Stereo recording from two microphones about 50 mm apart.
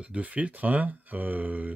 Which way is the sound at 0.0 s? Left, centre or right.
Right.